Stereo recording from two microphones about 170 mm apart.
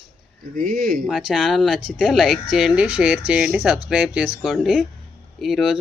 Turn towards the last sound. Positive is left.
turn(degrees=-5)  # may be behind; listen again after turning